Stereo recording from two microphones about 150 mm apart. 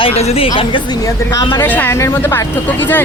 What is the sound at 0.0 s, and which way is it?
Speech, 40° left (ahead or behind).